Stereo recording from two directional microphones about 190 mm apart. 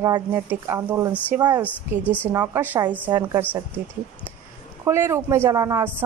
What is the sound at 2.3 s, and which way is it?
A woman's voice, 10° right (ahead or behind).